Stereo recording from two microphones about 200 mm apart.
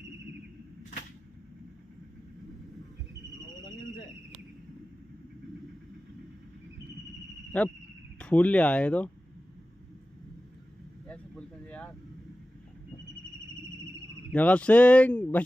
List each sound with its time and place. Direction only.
7.5 s speech: 5° left (ahead or behind)
11.1 s a sound: 5° left (ahead or behind)
14.3 s speech: 5° left (ahead or behind)